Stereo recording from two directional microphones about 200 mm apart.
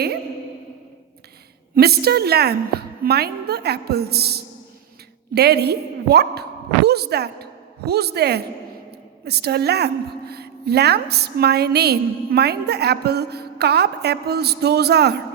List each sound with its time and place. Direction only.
1.7 s a woman's voice: 50° right (ahead or behind)